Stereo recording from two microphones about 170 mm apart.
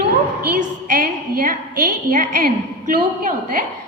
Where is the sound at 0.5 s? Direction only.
55° right (ahead or behind).